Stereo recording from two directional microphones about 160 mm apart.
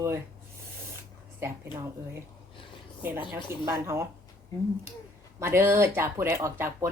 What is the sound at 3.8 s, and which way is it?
Speech, 20° right (ahead or behind).